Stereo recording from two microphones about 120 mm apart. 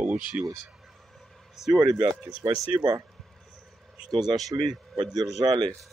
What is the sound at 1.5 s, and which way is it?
Speech, 5° right (ahead or behind).